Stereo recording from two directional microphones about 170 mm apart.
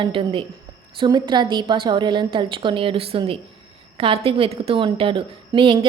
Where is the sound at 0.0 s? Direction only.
30° right (ahead or behind).